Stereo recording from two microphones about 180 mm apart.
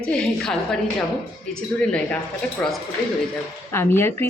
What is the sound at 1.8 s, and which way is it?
Speech, 5° left (ahead or behind).